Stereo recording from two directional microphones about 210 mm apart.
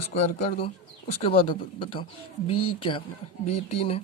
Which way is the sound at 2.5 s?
90° left.